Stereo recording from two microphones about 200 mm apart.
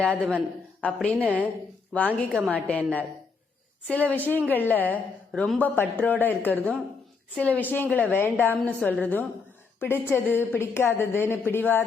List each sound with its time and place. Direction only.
0.0 s a man's voice: 5° left (ahead or behind)
1.2 s a woman's voice: 10° right (ahead or behind)
2.5 s a woman's voice: 5° left (ahead or behind)